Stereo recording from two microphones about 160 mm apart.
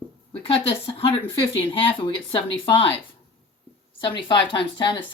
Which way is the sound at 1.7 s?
30° left (ahead or behind).